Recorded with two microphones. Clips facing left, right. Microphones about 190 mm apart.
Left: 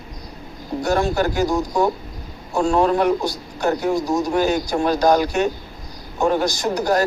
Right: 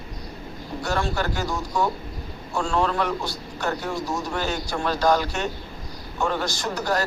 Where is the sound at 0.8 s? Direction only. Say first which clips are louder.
Left 7 dB; 45° left (ahead or behind).